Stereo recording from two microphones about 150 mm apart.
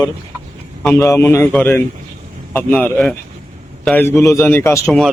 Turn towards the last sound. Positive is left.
turn(degrees=20)  # may be behind; listen again after turning